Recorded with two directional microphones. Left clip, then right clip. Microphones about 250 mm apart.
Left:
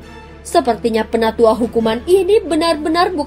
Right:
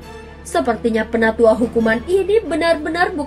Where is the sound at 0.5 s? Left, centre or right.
Left.